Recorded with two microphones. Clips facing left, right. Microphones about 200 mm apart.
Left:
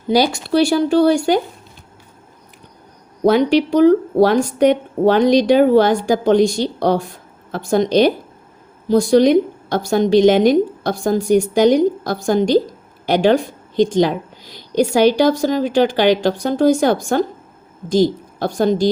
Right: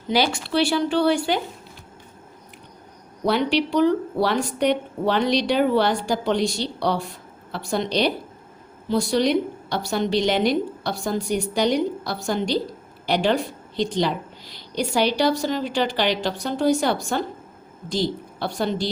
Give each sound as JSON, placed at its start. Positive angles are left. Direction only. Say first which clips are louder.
{"t": 0.1, "sound": "a woman's voice", "louder": "left 6 dB", "side_deg": 40}
{"t": 3.2, "sound": "a woman's voice", "louder": "left 8 dB", "side_deg": 45}